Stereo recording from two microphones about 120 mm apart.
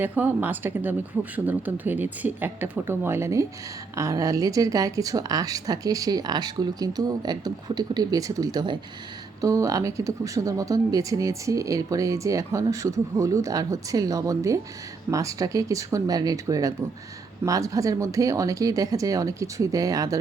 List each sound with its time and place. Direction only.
0.0 s speech: 15° right (ahead or behind)